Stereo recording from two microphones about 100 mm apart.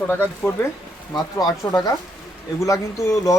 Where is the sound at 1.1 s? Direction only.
40° left (ahead or behind).